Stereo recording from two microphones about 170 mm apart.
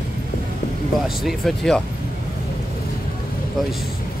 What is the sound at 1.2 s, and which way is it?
Speech, centre (ahead or behind).